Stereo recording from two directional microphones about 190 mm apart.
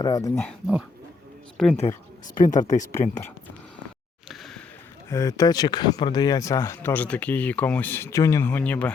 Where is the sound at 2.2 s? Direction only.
40° left (ahead or behind).